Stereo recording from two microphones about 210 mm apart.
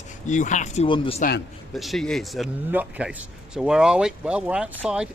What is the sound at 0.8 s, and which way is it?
Speech, 25° left (ahead or behind).